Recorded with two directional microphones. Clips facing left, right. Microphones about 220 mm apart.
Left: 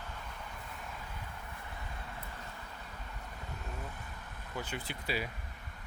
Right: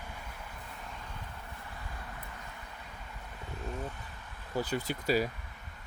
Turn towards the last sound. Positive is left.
turn(degrees=-40)  # may be behind; listen again after turning